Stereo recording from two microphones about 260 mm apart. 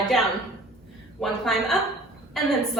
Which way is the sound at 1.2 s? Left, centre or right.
Centre.